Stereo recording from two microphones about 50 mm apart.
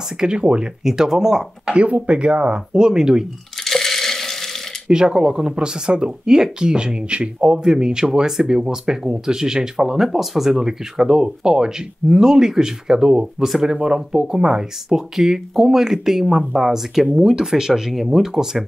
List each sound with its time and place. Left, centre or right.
0.2 s speech: centre
1.7 s speech: right
3.6 s a sound: centre
4.8 s speech: centre
17.1 s speech: centre